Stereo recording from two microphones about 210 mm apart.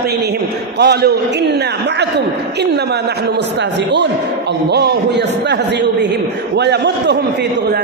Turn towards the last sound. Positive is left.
turn(degrees=-55)  # may be behind; listen again after turning